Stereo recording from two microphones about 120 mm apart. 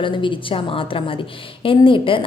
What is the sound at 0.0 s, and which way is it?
A woman's voice, 45° left (ahead or behind).